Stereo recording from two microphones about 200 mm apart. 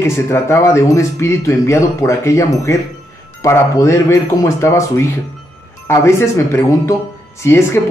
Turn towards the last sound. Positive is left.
turn(degrees=15)  # may be behind; listen again after turning